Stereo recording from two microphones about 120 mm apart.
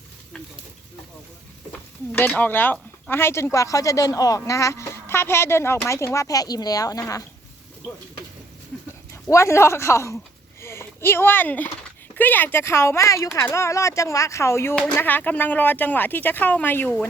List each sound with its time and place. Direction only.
2.1 s speech: 15° left (ahead or behind)
9.3 s speech: 25° left (ahead or behind)